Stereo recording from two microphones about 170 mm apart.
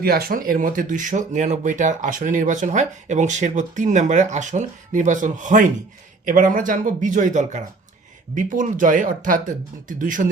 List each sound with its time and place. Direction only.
0.0 s speech: 65° right (ahead or behind)